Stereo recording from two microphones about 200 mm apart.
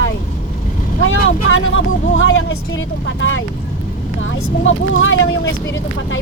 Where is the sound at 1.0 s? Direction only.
75° left (ahead or behind).